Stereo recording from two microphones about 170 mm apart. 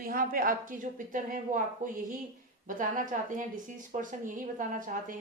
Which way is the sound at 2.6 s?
50° right (ahead or behind).